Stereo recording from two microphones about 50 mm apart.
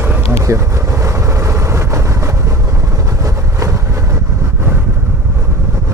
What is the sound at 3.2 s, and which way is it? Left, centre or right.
Vehicle, right.